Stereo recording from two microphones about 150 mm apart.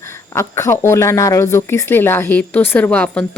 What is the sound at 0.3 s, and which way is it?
Speech, 20° left (ahead or behind).